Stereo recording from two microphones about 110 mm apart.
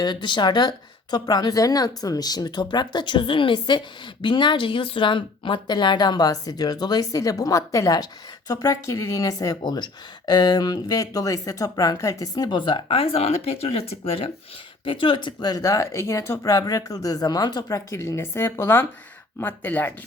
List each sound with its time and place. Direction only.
0.0 s speech: 45° left (ahead or behind); by 19.9 s 15° left (ahead or behind)